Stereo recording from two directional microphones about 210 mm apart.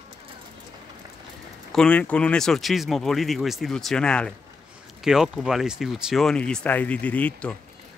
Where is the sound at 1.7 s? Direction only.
5° left (ahead or behind).